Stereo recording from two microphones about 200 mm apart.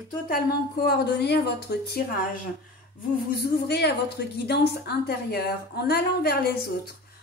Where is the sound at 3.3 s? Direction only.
50° left (ahead or behind).